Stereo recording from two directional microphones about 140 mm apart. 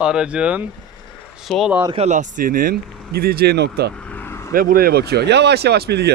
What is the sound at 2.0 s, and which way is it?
Speech, 65° right (ahead or behind).